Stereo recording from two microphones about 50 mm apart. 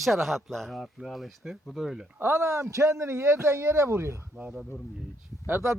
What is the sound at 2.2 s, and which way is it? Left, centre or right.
Speech, right.